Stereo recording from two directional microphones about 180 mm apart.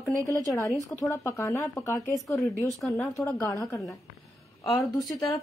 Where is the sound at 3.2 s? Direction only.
20° left (ahead or behind).